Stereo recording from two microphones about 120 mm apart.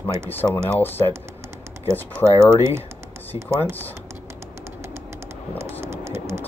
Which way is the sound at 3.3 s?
35° right (ahead or behind).